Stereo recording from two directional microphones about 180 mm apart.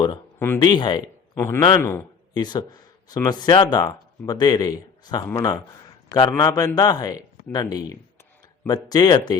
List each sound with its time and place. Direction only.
0.0 s speech: 15° left (ahead or behind)
0.6 s a man's voice: 25° left (ahead or behind)
1.8 s a sound: 15° left (ahead or behind)
2.4 s speech: 25° left (ahead or behind)